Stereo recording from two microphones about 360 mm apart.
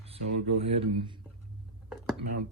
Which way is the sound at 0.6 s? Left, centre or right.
Centre.